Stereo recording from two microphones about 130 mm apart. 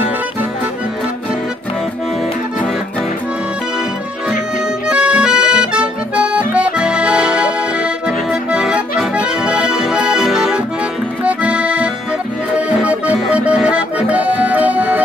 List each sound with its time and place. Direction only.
4.8 s accordion: 10° right (ahead or behind)